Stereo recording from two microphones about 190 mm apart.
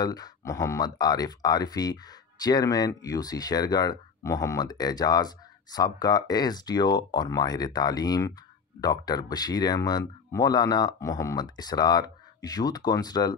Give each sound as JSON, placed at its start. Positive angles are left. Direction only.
{"t": 0.0, "sound": "speech", "side_deg": 20}